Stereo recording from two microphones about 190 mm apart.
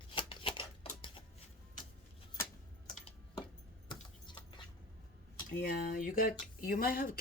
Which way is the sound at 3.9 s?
25° left (ahead or behind).